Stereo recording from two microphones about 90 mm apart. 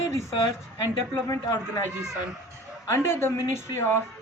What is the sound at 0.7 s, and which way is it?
Speech, 40° left (ahead or behind).